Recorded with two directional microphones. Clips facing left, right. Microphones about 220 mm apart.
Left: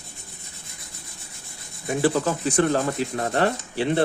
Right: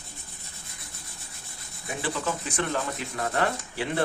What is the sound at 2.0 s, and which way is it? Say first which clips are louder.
Speech: left 9 dB; 40° left (ahead or behind).